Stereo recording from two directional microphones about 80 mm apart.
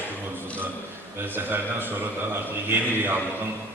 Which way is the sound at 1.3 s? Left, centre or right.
Right.